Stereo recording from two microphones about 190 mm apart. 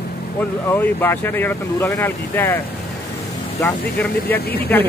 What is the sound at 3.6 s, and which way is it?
Speech, 10° left (ahead or behind).